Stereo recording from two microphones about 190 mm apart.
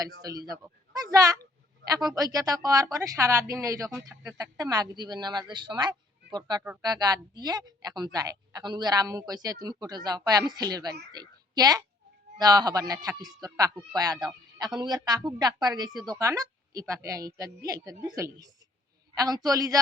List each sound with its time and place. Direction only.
0.0 s a woman's voice: 20° right (ahead or behind)